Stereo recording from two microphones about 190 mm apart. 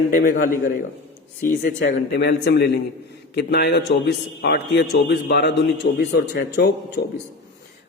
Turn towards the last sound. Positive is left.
turn(degrees=60)  # may be behind; listen again after turning